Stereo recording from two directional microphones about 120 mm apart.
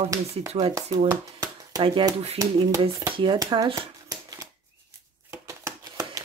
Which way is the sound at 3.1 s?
40° right (ahead or behind).